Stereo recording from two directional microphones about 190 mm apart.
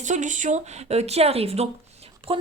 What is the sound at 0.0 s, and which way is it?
Speech, 40° right (ahead or behind).